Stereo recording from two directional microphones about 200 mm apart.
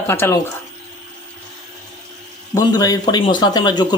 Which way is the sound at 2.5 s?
20° left (ahead or behind).